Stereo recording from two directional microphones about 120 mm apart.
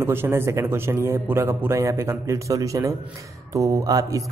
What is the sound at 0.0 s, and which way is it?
A man's voice, 20° right (ahead or behind).